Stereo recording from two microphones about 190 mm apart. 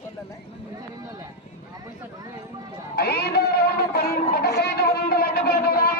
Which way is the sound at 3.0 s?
55° left (ahead or behind).